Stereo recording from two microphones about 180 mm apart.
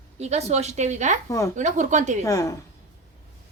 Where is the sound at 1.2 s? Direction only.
15° left (ahead or behind).